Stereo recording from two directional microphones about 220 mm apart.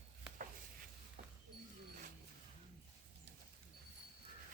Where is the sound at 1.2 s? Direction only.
35° right (ahead or behind).